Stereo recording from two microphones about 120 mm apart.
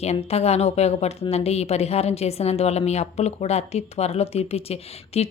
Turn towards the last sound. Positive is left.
turn(degrees=60)  # may be behind; listen again after turning